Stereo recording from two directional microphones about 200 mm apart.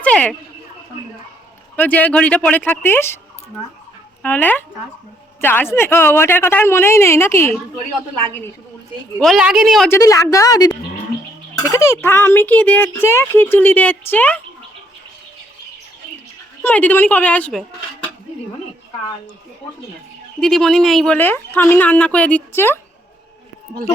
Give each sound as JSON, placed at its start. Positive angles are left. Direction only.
{"t": 0.0, "sound": "a sound", "side_deg": 5}
{"t": 1.7, "sound": "a child's voice", "side_deg": 10}
{"t": 9.2, "sound": "a woman's voice", "side_deg": 0}
{"t": 9.9, "sound": "a child's voice", "side_deg": 15}
{"t": 16.6, "sound": "a child's voice", "side_deg": 10}
{"t": 20.4, "sound": "a child's voice", "side_deg": 0}